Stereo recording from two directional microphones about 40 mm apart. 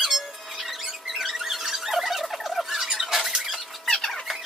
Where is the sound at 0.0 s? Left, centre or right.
Centre.